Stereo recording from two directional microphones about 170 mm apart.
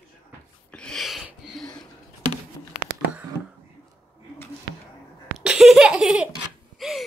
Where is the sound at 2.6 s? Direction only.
20° left (ahead or behind).